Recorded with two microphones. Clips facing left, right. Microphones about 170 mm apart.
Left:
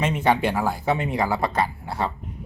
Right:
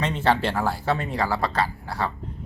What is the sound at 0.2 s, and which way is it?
Speech, 15° left (ahead or behind).